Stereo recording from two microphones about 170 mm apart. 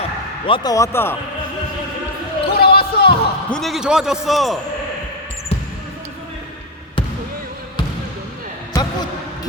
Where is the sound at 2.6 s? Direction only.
65° left (ahead or behind).